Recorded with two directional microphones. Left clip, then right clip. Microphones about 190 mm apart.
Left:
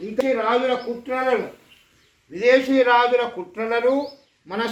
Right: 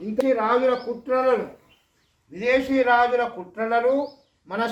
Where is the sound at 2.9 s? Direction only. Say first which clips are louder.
Left 2 dB; 25° left (ahead or behind).